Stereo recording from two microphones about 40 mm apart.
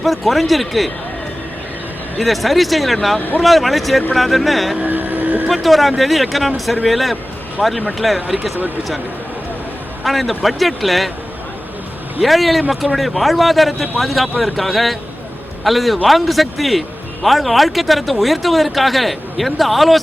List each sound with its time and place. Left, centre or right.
0.0 s speech: centre
2.1 s speech: centre
3.2 s speech: left
3.4 s speech: centre
4.8 s speech: right
5.5 s speech: centre
10.0 s speech: centre
12.2 s speech: centre